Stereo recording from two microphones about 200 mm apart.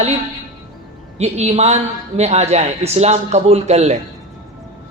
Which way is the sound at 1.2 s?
35° right (ahead or behind).